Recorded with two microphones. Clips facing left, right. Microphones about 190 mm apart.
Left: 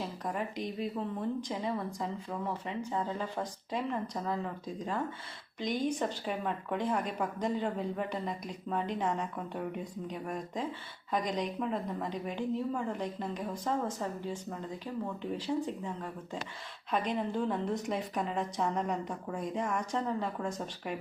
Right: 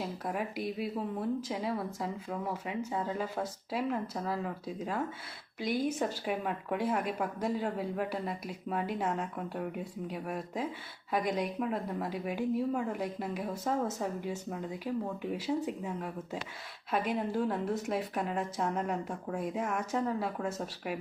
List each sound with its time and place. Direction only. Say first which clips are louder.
0.0 s a woman's voice: right 1 dB; 10° right (ahead or behind)